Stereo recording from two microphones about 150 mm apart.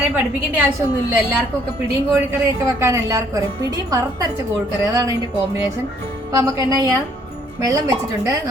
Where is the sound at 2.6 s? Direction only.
20° right (ahead or behind).